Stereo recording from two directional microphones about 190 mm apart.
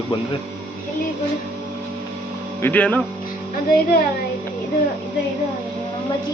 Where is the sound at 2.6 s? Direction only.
10° left (ahead or behind).